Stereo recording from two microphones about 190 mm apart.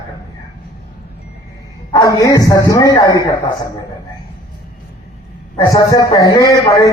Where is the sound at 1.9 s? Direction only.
20° left (ahead or behind).